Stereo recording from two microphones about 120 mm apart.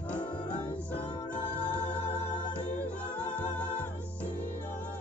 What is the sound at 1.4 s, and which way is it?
Music, 50° left (ahead or behind).